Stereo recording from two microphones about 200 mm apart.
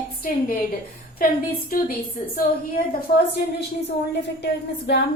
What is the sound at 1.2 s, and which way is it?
Speech, 45° left (ahead or behind).